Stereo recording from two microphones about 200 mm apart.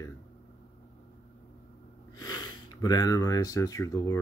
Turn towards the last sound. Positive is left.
turn(degrees=15)  # may be behind; listen again after turning